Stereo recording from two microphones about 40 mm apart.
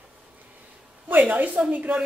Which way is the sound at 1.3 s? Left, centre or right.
Right.